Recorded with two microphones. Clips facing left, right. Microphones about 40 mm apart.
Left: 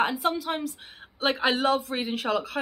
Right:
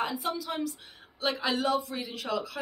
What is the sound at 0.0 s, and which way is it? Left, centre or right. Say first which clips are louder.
A man's voice: left 6 dB; left.